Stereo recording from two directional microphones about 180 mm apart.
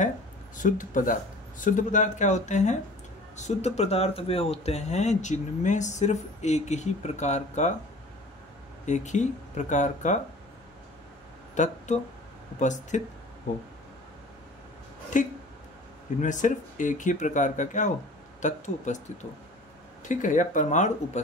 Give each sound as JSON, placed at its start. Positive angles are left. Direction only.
{"t": 0.6, "sound": "speech", "side_deg": 45}
{"t": 8.8, "sound": "speech", "side_deg": 40}
{"t": 11.5, "sound": "speech", "side_deg": 40}
{"t": 15.1, "sound": "speech", "side_deg": 45}
{"t": 20.0, "sound": "speech", "side_deg": 45}